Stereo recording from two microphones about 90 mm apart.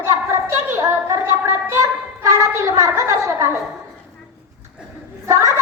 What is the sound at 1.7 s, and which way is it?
A woman's voice, 35° right (ahead or behind).